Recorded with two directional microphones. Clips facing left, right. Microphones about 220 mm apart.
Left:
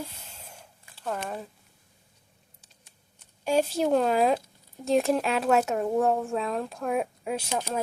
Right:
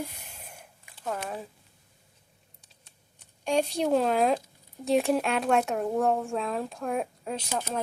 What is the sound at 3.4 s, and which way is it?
Speech, 5° left (ahead or behind).